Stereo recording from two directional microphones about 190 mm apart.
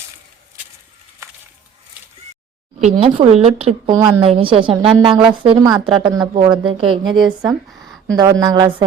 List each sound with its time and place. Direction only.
1.2 s a sound: 15° right (ahead or behind)
2.9 s a woman's voice: 30° right (ahead or behind)
7.1 s speech: centre (ahead or behind)
8.0 s a woman's voice: 20° right (ahead or behind)